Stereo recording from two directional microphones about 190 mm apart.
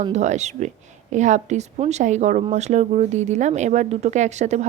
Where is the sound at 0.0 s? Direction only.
35° right (ahead or behind).